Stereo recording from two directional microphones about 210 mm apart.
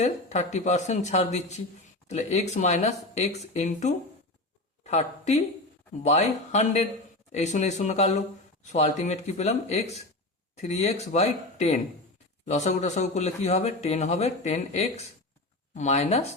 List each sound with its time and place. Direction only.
0.0 s speech: 30° left (ahead or behind)